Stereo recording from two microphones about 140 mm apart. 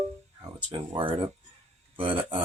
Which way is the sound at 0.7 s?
40° right (ahead or behind).